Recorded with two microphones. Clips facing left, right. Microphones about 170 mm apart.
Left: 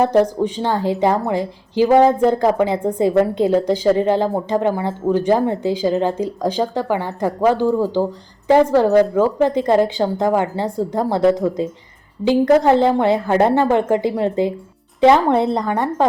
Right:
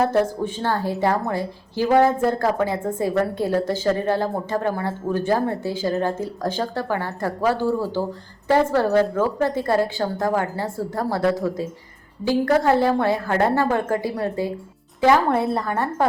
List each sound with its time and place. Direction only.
0.0 s a woman's voice: 15° left (ahead or behind)